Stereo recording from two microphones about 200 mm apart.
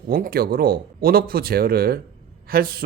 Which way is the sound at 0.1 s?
45° right (ahead or behind).